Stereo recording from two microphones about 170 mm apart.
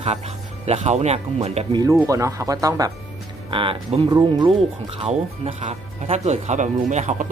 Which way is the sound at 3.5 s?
30° right (ahead or behind).